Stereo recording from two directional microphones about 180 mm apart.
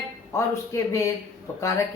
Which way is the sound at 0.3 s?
15° left (ahead or behind).